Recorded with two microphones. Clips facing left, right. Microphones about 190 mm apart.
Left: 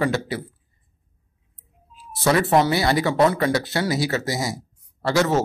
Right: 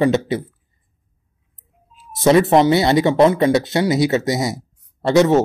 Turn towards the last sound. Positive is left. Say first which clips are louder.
# right 7 dB
turn(degrees=-20)  # may be behind; listen again after turning